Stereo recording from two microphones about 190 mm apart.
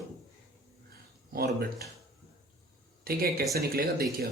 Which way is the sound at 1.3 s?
55° right (ahead or behind).